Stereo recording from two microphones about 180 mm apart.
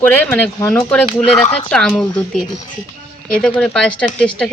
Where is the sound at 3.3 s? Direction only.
5° left (ahead or behind).